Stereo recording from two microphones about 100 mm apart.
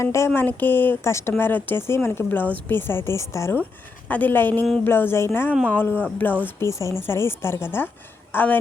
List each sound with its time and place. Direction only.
0.0 s speech: 30° left (ahead or behind)
0.3 s speech: 20° left (ahead or behind)
4.1 s speech: 20° left (ahead or behind)
6.7 s a woman's voice: 30° left (ahead or behind)